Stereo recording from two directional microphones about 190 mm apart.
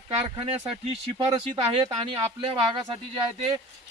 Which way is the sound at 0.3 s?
30° right (ahead or behind).